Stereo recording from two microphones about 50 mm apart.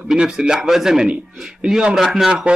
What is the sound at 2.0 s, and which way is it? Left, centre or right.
Speech, centre.